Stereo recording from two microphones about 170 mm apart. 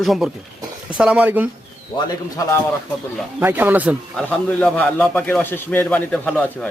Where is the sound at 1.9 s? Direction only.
25° left (ahead or behind).